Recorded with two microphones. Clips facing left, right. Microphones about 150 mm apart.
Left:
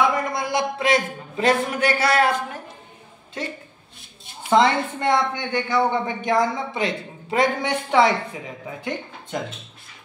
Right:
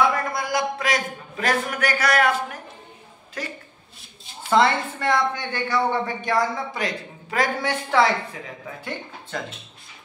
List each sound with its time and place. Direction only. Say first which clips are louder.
0.1 s a man's voice: left 1 dB; 20° left (ahead or behind)
9.3 s speech: left 3 dB; 15° left (ahead or behind)